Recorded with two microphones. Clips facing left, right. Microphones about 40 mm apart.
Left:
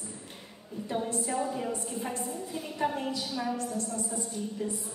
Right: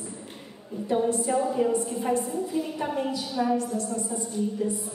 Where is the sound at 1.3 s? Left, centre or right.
Centre.